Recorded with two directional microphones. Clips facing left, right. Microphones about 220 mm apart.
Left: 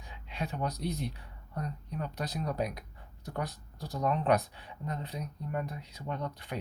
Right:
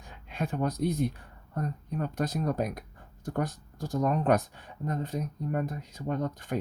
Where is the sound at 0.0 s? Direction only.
50° right (ahead or behind).